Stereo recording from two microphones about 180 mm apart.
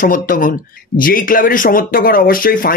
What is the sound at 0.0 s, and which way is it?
A man's voice, 50° left (ahead or behind).